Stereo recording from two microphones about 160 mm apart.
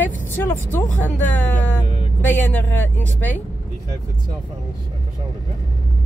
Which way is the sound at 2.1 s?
10° left (ahead or behind).